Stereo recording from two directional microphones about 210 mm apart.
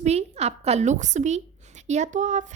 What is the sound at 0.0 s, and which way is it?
A woman's voice, 30° right (ahead or behind).